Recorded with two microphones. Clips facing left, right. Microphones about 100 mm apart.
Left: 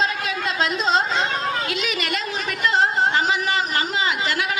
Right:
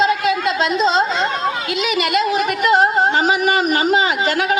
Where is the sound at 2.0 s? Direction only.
35° left (ahead or behind).